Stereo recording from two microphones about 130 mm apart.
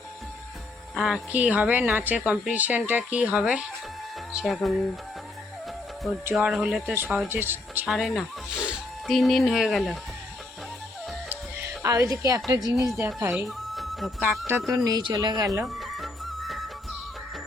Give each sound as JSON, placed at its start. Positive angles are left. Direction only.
{"t": 0.9, "sound": "speech", "side_deg": 0}
{"t": 6.3, "sound": "speech", "side_deg": -5}
{"t": 6.9, "sound": "speech", "side_deg": -15}
{"t": 7.9, "sound": "speech", "side_deg": 0}
{"t": 11.3, "sound": "music", "side_deg": -20}
{"t": 11.8, "sound": "speech", "side_deg": -25}
{"t": 13.7, "sound": "music", "side_deg": 0}
{"t": 14.2, "sound": "speech", "side_deg": -5}
{"t": 14.8, "sound": "speech", "side_deg": -30}
{"t": 15.6, "sound": "music", "side_deg": 0}